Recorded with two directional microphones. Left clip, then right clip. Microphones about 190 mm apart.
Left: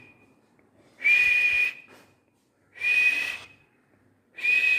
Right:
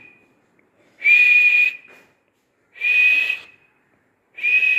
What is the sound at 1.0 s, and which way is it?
Whistle, 10° left (ahead or behind).